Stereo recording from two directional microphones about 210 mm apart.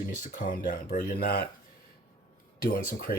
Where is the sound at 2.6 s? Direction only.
45° left (ahead or behind).